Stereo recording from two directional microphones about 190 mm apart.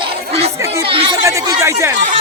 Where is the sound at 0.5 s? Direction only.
15° right (ahead or behind).